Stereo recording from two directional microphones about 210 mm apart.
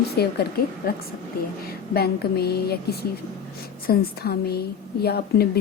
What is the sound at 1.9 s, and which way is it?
Speech, 45° left (ahead or behind).